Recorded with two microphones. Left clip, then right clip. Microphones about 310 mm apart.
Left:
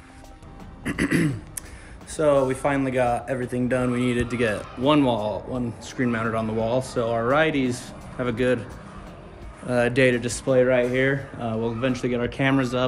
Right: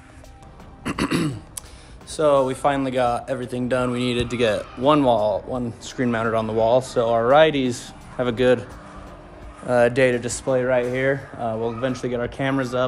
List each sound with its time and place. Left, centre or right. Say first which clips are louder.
0.8 s throat clearing: even; centre
2.1 s speech: right 2 dB; centre
9.7 s speech: right 3 dB; centre